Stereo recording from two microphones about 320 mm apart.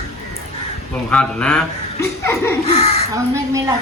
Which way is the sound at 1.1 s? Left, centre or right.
Centre.